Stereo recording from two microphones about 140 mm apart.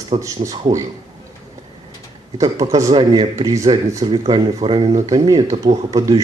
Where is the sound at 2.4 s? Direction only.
25° right (ahead or behind).